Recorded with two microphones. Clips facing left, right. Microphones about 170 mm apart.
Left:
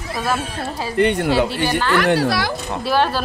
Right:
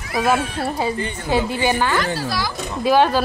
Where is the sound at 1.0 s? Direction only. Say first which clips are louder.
Left 5 dB; 70° left (ahead or behind).